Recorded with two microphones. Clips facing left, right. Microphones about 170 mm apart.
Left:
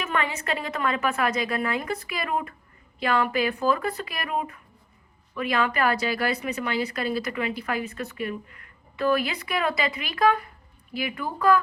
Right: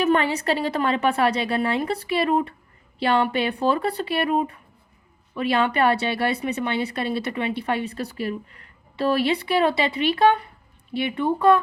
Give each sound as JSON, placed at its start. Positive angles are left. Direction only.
{"t": 0.0, "sound": "a woman's voice", "side_deg": -35}